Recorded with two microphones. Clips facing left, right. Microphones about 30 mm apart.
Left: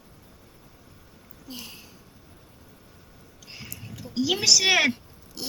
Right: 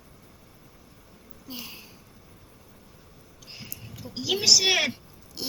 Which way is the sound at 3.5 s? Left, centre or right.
Centre.